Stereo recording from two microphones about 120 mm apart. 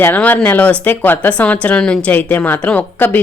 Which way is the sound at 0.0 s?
15° left (ahead or behind).